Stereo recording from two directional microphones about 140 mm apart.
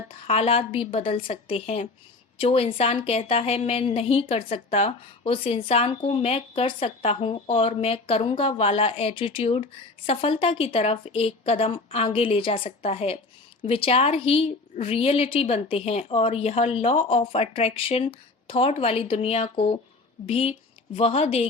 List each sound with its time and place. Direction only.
0.1 s a woman's voice: 45° left (ahead or behind)